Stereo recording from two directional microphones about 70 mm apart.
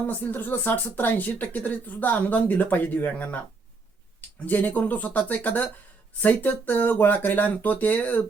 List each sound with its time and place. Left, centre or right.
0.1 s speech: left
4.4 s speech: left